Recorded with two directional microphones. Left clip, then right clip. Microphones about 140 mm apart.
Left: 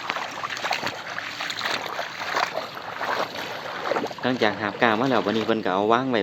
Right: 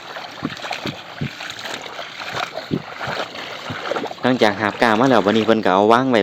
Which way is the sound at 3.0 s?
90° right.